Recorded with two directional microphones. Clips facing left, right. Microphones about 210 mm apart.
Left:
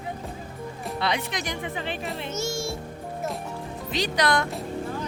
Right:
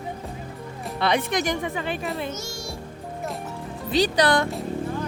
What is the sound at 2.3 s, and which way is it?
Music, 25° left (ahead or behind).